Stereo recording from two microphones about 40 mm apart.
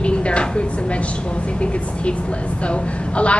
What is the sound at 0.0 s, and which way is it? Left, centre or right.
Vehicle, left.